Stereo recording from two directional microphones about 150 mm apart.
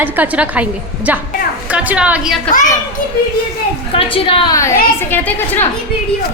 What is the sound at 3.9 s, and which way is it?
Speech, 40° left (ahead or behind).